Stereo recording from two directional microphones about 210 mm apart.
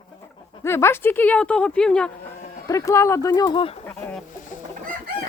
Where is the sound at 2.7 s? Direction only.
15° left (ahead or behind).